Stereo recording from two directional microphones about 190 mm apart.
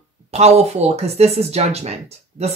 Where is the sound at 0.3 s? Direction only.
35° right (ahead or behind).